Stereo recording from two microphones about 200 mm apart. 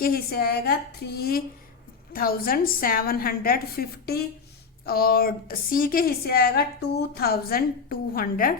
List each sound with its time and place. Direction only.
0.0 s a woman's voice: 50° left (ahead or behind)